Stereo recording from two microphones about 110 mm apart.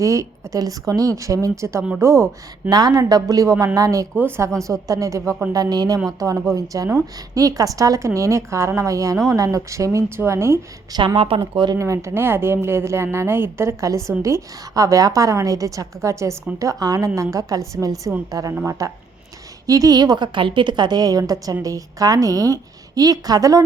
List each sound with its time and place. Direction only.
0.0 s a woman's voice: 30° right (ahead or behind)
2.6 s a woman's voice: 35° right (ahead or behind)
10.9 s speech: 50° right (ahead or behind)
11.8 s a woman's voice: 30° right (ahead or behind)